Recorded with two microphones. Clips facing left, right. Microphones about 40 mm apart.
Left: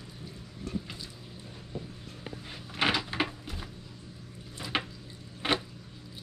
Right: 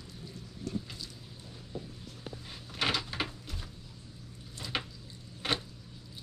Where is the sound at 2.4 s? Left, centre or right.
Centre.